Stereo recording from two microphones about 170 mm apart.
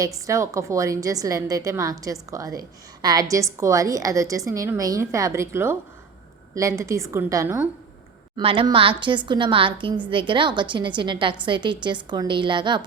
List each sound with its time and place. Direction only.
0.3 s a woman's voice: 20° right (ahead or behind)
8.4 s a woman's voice: 30° right (ahead or behind)